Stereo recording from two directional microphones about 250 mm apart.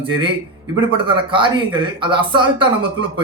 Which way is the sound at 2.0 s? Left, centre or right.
Centre.